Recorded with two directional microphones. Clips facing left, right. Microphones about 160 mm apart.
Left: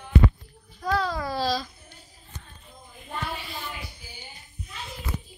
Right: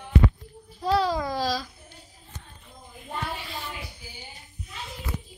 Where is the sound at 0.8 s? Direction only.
25° right (ahead or behind).